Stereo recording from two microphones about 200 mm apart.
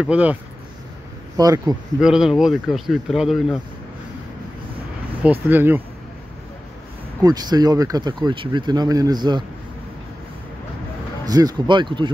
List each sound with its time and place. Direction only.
0.0 s speech: 5° right (ahead or behind)
1.3 s speech: 20° right (ahead or behind)
2.0 s speech: 5° right (ahead or behind)
5.2 s speech: 10° right (ahead or behind)
7.2 s speech: 20° right (ahead or behind)
11.2 s speech: 20° right (ahead or behind)